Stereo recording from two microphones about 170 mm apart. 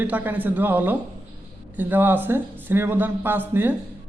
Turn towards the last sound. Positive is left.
turn(degrees=-10)  # may be behind; listen again after turning